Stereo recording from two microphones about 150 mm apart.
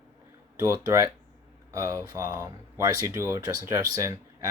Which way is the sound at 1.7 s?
20° right (ahead or behind).